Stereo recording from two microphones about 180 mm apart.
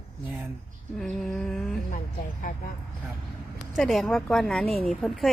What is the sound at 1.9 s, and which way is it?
Speech, 50° left (ahead or behind).